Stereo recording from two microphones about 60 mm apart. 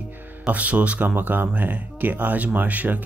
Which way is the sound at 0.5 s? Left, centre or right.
Right.